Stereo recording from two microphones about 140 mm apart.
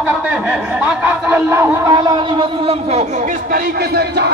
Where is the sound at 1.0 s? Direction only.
15° right (ahead or behind).